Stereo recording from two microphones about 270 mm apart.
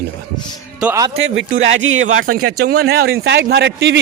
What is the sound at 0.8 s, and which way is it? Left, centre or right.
Speech, centre.